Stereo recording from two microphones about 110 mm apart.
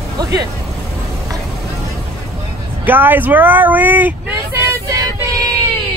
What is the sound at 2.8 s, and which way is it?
Speech, 15° right (ahead or behind).